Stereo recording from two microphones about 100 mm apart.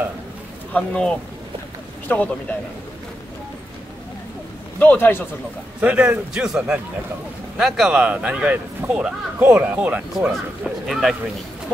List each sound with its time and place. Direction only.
0.7 s speech: 10° left (ahead or behind)
4.7 s a man's voice: 20° left (ahead or behind)
5.8 s speech: 15° right (ahead or behind)
10.9 s speech: centre (ahead or behind)